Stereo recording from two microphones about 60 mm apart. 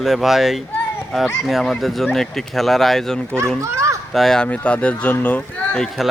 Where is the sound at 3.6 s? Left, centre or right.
Right.